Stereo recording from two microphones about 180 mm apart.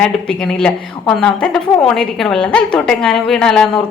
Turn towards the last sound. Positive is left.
turn(degrees=0)  # may be behind; listen again after turning